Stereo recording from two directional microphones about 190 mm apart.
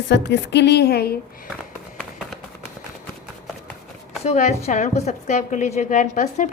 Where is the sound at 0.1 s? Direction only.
65° left (ahead or behind).